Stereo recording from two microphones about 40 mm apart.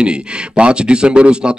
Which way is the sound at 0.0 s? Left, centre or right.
Right.